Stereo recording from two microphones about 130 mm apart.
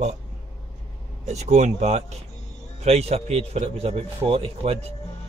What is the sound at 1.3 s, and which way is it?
Speech, 60° right (ahead or behind).